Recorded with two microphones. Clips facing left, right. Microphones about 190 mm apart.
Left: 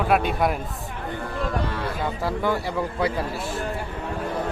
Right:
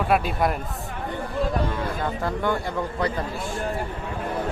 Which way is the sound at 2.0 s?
5° left (ahead or behind).